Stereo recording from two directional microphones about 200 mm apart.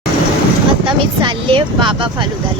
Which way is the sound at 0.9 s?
25° right (ahead or behind).